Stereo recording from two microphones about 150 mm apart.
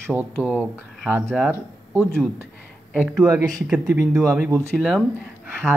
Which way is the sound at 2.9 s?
10° right (ahead or behind).